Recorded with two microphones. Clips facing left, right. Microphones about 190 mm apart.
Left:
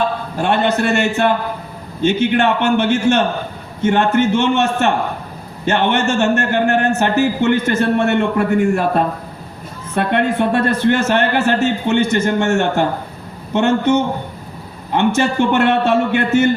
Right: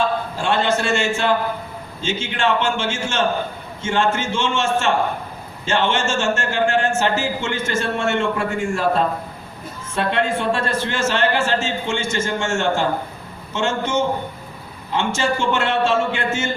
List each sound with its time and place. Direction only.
0.3 s a man's voice: 60° left (ahead or behind)